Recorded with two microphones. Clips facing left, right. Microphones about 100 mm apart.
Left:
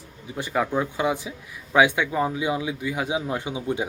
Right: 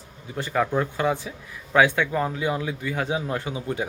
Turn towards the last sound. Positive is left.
turn(degrees=15)  # may be behind; listen again after turning